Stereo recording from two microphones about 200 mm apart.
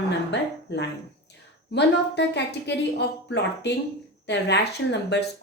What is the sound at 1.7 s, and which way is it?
Speech, 55° left (ahead or behind).